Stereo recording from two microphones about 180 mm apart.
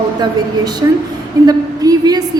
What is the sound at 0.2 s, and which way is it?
A woman's voice, 25° right (ahead or behind).